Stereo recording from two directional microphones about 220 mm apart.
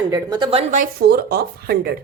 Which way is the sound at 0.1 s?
20° right (ahead or behind).